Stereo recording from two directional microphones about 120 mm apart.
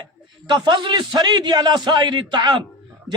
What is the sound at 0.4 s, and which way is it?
A man's voice, 40° right (ahead or behind).